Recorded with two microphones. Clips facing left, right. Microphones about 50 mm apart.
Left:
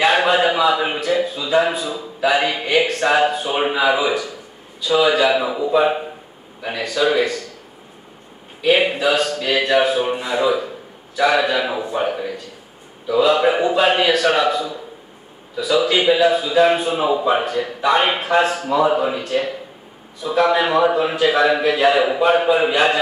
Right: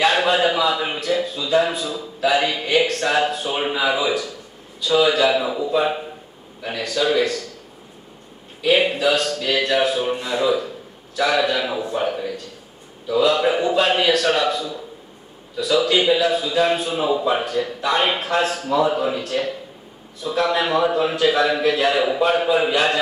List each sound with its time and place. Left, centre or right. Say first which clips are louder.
0.0 s a man's voice: left 2 dB; centre
8.6 s a man's voice: left 1 dB; centre